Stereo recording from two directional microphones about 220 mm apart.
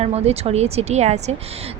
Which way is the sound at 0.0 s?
30° right (ahead or behind).